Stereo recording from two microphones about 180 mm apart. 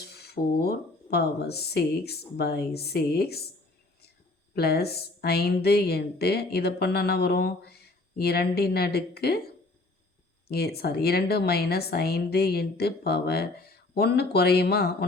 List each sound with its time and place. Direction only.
0.0 s speech: 65° left (ahead or behind)
4.5 s a woman's voice: 60° left (ahead or behind)
10.5 s a woman's voice: 60° left (ahead or behind)